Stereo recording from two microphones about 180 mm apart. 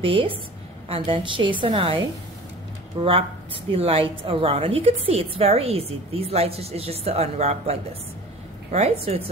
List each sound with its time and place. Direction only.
0.0 s a woman's voice: 30° right (ahead or behind)
3.0 s a woman's voice: 30° right (ahead or behind)
8.7 s a woman's voice: 35° right (ahead or behind)